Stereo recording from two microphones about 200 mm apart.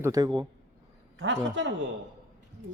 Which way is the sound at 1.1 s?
65° right (ahead or behind).